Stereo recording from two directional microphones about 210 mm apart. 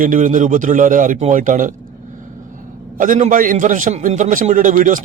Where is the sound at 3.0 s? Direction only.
40° right (ahead or behind).